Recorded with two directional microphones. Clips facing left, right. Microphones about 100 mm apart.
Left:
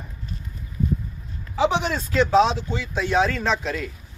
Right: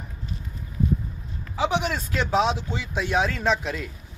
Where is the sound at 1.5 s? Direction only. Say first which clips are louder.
Left 3 dB; 5° right (ahead or behind).